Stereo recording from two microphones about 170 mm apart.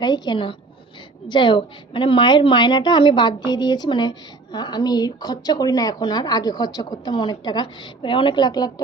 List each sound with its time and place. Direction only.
0.0 s a woman's voice: 25° left (ahead or behind)